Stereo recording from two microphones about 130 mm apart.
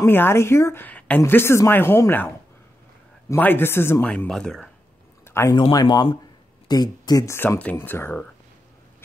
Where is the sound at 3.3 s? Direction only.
15° left (ahead or behind).